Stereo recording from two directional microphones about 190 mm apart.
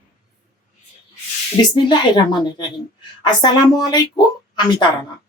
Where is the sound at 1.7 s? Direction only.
20° left (ahead or behind).